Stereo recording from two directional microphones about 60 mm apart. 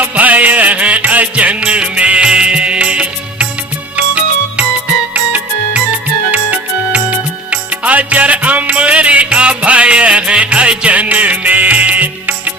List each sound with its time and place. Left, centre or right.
0.0 s music: right